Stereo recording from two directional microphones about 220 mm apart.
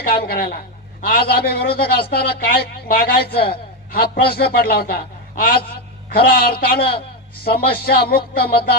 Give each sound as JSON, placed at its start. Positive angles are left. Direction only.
{"t": 0.0, "sound": "a man's voice", "side_deg": 45}